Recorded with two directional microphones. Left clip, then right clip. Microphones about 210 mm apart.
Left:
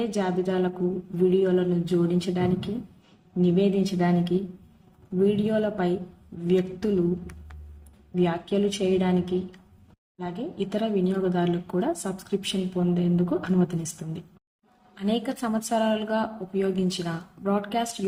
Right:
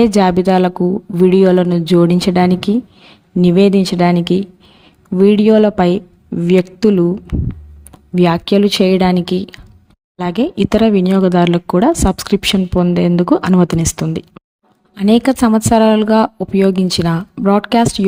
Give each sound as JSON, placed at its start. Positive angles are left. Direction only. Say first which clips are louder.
{"t": 0.0, "sound": "speech", "louder": "right 15 dB", "side_deg": -55}
{"t": 8.1, "sound": "speech", "louder": "right 13 dB", "side_deg": -55}